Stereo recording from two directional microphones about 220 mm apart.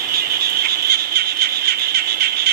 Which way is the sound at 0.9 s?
45° right (ahead or behind).